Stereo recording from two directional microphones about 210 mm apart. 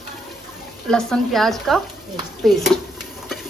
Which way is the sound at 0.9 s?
5° left (ahead or behind).